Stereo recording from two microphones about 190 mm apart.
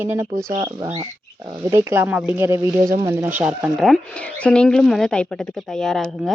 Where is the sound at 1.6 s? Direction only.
15° right (ahead or behind).